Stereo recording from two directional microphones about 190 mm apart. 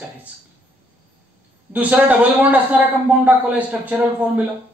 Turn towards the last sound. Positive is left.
turn(degrees=-5)  # may be behind; listen again after turning